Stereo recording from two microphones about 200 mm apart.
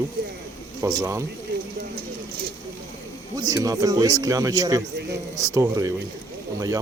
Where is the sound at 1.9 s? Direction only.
50° right (ahead or behind).